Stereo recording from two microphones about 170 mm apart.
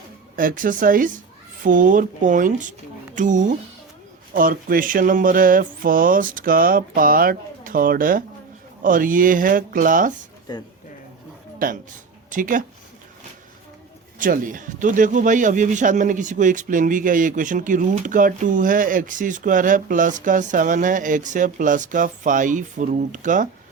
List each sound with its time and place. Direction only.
0.3 s a man's voice: 55° right (ahead or behind)
4.4 s a sound: 55° right (ahead or behind)
8.8 s a man's voice: 55° right (ahead or behind)
10.5 s speech: 25° left (ahead or behind)
12.3 s a man's voice: 50° right (ahead or behind)
14.2 s a man's voice: 50° right (ahead or behind)